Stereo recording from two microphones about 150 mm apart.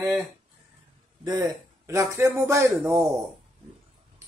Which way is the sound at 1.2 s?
20° right (ahead or behind).